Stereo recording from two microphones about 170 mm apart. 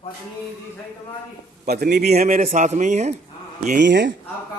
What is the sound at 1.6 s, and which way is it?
Speech, 70° right (ahead or behind).